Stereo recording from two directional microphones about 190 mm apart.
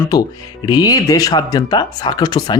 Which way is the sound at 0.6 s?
20° left (ahead or behind).